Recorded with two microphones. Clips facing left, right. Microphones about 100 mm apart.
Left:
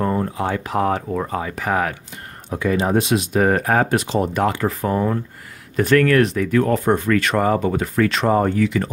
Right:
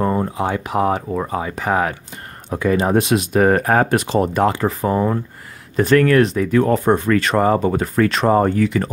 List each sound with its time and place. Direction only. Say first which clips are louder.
0.0 s speech: right 2 dB; 20° right (ahead or behind)
2.5 s speech: right 2 dB; 40° right (ahead or behind)
4.3 s speech: right 2 dB; 30° right (ahead or behind)